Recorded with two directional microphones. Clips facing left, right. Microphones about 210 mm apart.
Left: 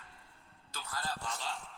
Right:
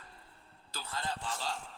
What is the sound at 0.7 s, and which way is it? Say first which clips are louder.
Speech: right 2 dB; 25° right (ahead or behind).